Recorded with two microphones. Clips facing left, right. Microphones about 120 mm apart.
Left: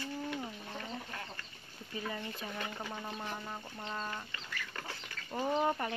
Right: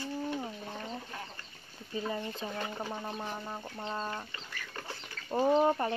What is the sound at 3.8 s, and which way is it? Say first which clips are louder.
Speech: right 4 dB; 25° right (ahead or behind).